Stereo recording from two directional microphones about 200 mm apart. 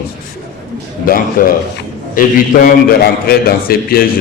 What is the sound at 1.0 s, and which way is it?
A man's voice, 45° left (ahead or behind).